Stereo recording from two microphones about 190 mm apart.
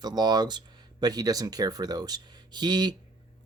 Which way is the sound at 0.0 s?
20° right (ahead or behind).